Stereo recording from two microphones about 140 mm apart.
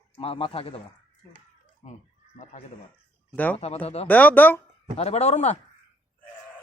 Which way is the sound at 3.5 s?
50° left (ahead or behind).